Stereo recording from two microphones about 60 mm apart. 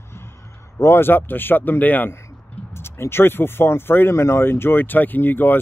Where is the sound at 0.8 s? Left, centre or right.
Left.